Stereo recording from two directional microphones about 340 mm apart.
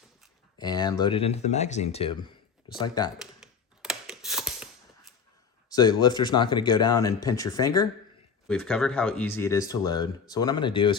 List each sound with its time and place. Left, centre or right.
0.6 s speech: centre
3.2 s a sound: centre
5.7 s speech: centre